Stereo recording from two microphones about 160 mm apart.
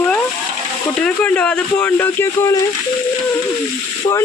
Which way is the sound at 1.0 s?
10° left (ahead or behind).